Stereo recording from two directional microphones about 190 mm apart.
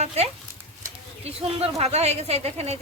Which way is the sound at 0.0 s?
35° right (ahead or behind).